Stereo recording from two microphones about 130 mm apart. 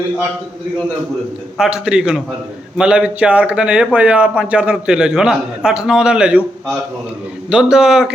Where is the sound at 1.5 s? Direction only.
5° right (ahead or behind).